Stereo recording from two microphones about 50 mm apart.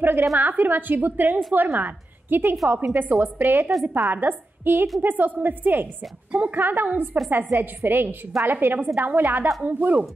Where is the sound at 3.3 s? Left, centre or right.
Right.